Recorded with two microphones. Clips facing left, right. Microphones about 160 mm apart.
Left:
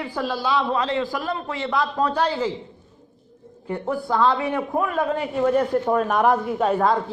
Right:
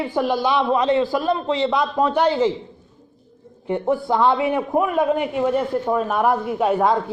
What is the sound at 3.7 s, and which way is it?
Speech, 20° right (ahead or behind).